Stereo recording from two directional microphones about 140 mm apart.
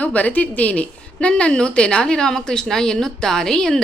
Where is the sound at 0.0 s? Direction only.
10° left (ahead or behind).